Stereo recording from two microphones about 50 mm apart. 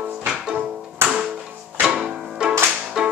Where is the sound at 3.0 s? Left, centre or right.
Centre.